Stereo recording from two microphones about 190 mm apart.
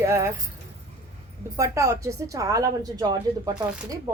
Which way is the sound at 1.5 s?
15° right (ahead or behind).